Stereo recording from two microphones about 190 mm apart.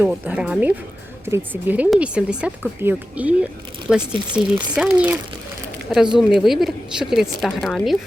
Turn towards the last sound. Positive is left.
turn(degrees=0)  # may be behind; listen again after turning